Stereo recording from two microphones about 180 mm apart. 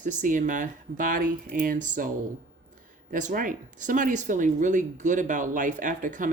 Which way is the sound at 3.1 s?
45° right (ahead or behind).